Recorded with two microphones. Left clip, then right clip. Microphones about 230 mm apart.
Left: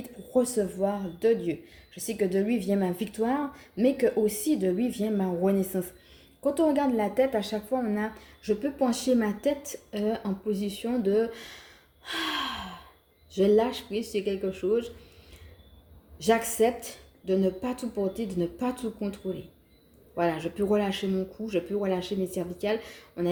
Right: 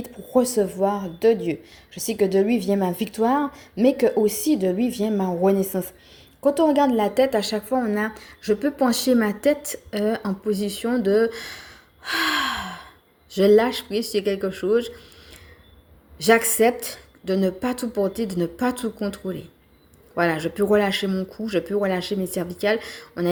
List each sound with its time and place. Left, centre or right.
0.0 s a woman's voice: right